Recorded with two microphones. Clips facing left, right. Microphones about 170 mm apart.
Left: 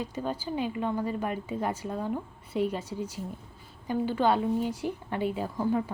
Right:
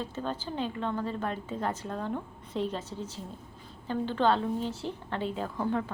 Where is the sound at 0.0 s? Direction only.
10° left (ahead or behind).